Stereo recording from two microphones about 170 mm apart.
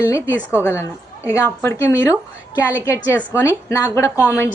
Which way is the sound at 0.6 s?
15° left (ahead or behind).